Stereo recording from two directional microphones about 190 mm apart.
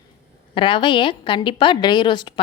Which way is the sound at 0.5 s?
25° left (ahead or behind).